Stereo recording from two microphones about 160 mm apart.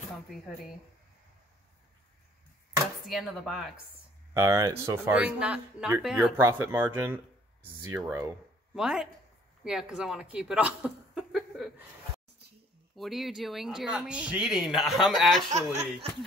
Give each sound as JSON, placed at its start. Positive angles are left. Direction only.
{"t": 3.1, "sound": "speech", "side_deg": 0}
{"t": 4.3, "sound": "speech", "side_deg": -20}
{"t": 8.7, "sound": "speech", "side_deg": -5}
{"t": 11.1, "sound": "a sound", "side_deg": -5}
{"t": 12.9, "sound": "speech", "side_deg": 0}
{"t": 15.5, "sound": "speech", "side_deg": -45}